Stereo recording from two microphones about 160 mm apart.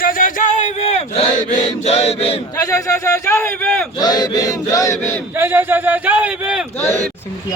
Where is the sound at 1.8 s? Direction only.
40° left (ahead or behind).